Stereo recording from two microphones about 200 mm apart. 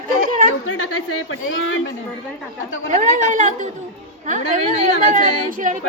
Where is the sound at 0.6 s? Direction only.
90° left.